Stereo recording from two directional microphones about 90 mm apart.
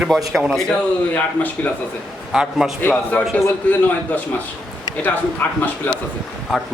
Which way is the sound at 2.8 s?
15° left (ahead or behind).